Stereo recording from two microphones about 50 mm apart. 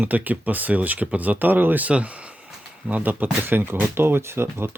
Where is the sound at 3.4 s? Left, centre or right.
Right.